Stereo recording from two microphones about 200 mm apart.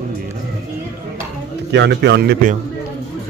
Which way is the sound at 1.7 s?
60° right (ahead or behind).